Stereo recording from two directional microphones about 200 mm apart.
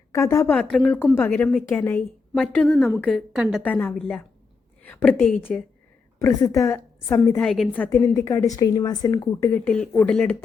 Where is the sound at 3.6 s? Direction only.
10° left (ahead or behind).